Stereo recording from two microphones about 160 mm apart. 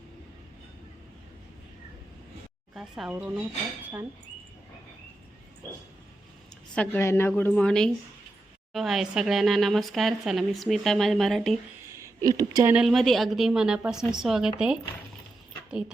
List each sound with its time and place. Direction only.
2.7 s speech: 5° right (ahead or behind)
6.7 s a woman's voice: 15° left (ahead or behind)
11.9 s a sound: 20° right (ahead or behind)
12.4 s speech: 25° right (ahead or behind)
12.7 s speech: centre (ahead or behind)